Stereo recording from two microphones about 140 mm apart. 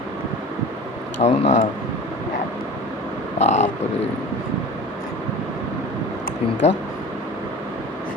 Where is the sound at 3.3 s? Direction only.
50° left (ahead or behind).